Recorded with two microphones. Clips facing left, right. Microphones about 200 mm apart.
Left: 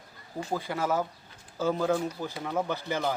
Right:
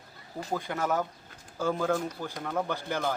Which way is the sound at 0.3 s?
5° left (ahead or behind).